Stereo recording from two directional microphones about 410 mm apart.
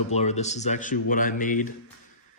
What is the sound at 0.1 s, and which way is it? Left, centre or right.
Speech, centre.